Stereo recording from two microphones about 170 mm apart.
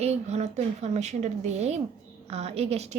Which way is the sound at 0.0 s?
40° right (ahead or behind).